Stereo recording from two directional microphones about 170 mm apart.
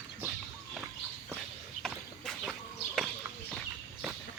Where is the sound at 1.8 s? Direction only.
Centre (ahead or behind).